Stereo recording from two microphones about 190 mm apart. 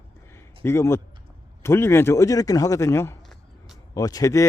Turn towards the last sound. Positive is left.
turn(degrees=15)  # may be behind; listen again after turning